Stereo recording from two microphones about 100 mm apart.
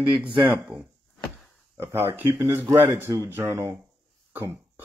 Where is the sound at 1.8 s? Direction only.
25° right (ahead or behind).